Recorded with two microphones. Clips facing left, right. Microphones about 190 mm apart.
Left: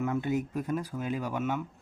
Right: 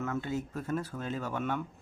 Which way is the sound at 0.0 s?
15° left (ahead or behind).